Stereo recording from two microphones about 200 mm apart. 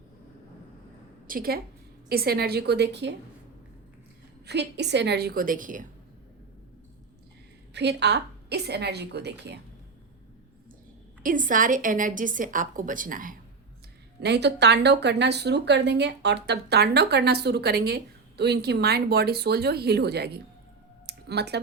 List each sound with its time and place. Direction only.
1.3 s a woman's voice: 50° right (ahead or behind)
4.4 s speech: 55° right (ahead or behind)
7.7 s speech: 60° right (ahead or behind)
11.2 s a woman's voice: 40° right (ahead or behind)
14.2 s speech: 55° right (ahead or behind)
21.1 s a sound: 55° right (ahead or behind)